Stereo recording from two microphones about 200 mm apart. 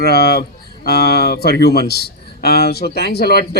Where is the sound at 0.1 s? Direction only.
55° left (ahead or behind).